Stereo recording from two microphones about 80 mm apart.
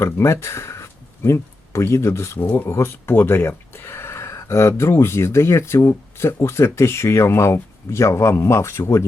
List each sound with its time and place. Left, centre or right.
0.0 s speech: left